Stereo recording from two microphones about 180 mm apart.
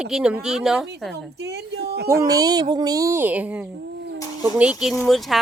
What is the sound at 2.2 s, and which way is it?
Speech, 20° right (ahead or behind).